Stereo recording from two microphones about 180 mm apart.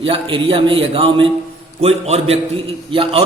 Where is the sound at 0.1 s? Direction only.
30° right (ahead or behind).